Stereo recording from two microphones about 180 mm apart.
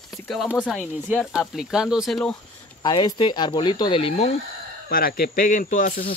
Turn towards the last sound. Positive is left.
turn(degrees=45)  # may be behind; listen again after turning